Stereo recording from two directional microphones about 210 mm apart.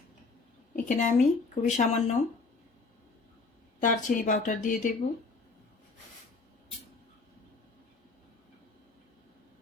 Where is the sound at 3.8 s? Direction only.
40° left (ahead or behind).